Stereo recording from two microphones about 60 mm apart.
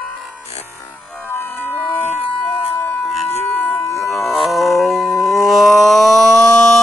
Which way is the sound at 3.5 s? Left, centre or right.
Left.